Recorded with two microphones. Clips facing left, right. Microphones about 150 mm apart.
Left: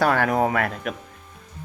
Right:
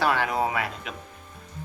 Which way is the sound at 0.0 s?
50° left (ahead or behind).